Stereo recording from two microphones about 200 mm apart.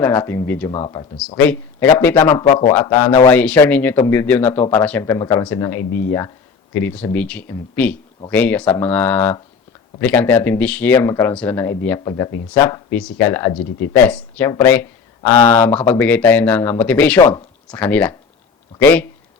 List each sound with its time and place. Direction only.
0.0 s speech: 10° left (ahead or behind)
0.7 s speech: 20° left (ahead or behind)
1.4 s speech: 10° left (ahead or behind)
2.3 s speech: 25° left (ahead or behind); by 18.1 s 10° left (ahead or behind)